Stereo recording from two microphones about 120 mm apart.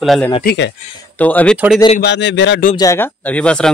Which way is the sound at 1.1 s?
10° left (ahead or behind).